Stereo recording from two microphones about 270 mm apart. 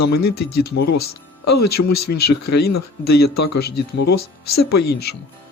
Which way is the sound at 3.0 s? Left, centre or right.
Left.